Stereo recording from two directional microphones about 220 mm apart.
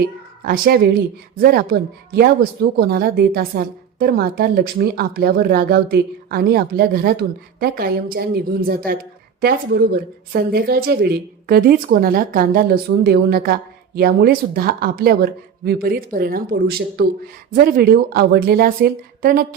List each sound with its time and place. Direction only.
0.0 s a woman's voice: 40° right (ahead or behind)